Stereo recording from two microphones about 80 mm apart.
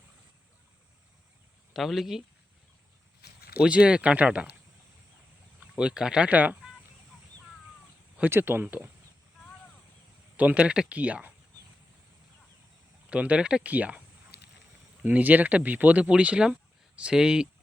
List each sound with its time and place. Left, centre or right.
1.7 s speech: centre
3.6 s speech: centre
5.5 s speech: centre
8.2 s speech: right
10.3 s speech: centre
13.1 s speech: centre
15.0 s speech: centre